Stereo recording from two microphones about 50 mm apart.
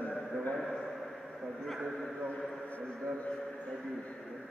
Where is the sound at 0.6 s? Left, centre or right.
Centre.